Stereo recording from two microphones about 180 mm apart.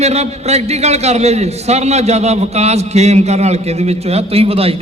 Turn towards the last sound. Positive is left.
turn(degrees=-35)  # may be behind; listen again after turning